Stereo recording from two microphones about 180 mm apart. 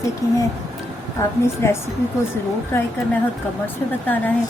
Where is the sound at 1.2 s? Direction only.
15° left (ahead or behind).